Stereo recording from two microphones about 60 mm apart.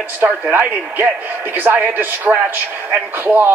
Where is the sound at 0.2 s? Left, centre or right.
Right.